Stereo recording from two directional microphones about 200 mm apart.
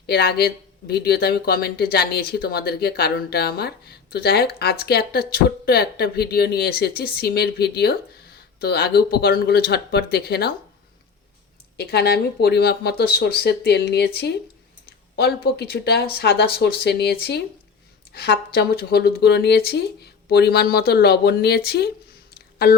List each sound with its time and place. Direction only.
0.1 s speech: 50° left (ahead or behind)
11.8 s speech: 50° left (ahead or behind)
22.4 s a sound: 50° left (ahead or behind)